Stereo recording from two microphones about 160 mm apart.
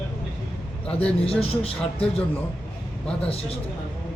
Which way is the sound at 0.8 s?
10° left (ahead or behind).